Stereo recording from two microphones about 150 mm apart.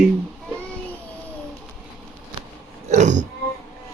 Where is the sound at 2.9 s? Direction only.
50° right (ahead or behind).